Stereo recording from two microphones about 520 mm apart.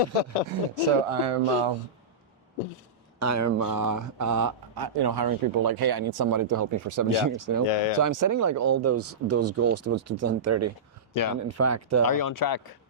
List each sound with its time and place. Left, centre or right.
0.5 s speech: right
1.1 s speech: right
3.2 s speech: right
7.7 s speech: left
7.9 s speech: right
11.1 s speech: left
11.3 s speech: right
12.0 s speech: left